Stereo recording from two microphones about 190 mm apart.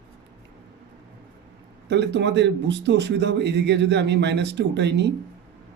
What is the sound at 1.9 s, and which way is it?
A man's voice, 65° right (ahead or behind).